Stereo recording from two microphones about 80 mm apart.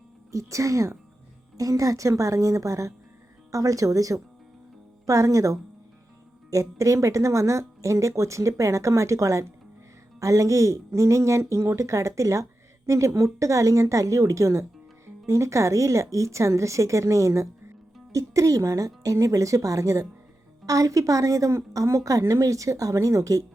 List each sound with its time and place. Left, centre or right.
0.3 s a woman's voice: right